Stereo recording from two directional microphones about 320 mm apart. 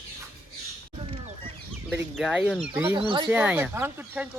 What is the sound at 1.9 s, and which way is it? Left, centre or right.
Speech, centre.